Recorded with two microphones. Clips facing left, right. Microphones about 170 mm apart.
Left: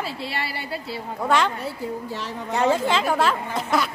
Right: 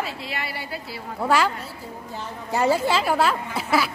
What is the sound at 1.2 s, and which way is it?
Speech, 5° right (ahead or behind).